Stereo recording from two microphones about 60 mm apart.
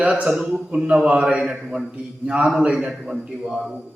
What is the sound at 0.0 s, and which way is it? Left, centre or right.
Speech, right.